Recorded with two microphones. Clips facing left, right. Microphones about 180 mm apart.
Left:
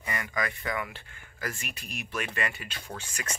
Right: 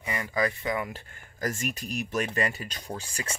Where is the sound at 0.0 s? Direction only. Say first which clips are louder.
Right 4 dB; 25° right (ahead or behind).